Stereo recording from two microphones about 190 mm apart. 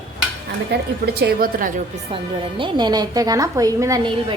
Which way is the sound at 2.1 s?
25° right (ahead or behind).